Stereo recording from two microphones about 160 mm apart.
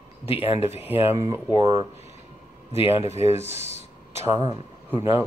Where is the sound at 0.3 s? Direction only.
40° left (ahead or behind).